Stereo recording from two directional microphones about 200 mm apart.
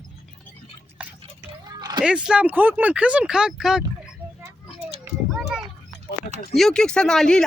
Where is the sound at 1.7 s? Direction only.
20° right (ahead or behind).